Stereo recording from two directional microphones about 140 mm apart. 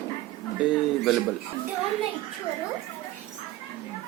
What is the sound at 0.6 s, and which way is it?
Speech, 5° right (ahead or behind).